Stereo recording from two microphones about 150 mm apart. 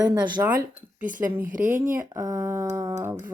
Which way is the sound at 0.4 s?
15° right (ahead or behind).